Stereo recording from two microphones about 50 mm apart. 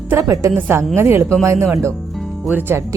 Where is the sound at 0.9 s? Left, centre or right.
Right.